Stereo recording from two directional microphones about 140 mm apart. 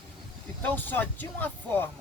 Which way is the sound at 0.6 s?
15° left (ahead or behind).